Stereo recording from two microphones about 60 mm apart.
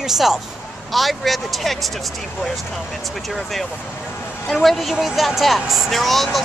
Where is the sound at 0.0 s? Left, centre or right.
Centre.